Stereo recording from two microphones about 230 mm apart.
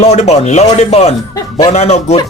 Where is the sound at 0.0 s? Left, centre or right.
Left.